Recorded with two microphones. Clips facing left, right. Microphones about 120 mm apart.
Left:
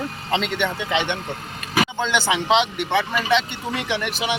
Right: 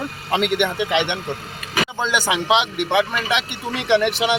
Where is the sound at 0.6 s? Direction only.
15° right (ahead or behind).